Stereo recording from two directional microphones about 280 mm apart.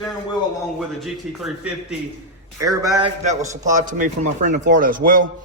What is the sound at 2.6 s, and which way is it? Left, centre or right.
Speech, centre.